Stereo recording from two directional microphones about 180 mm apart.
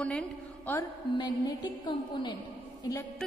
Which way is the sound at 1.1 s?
25° left (ahead or behind).